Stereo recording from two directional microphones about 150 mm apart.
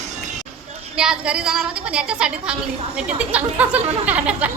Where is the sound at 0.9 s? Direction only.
5° right (ahead or behind).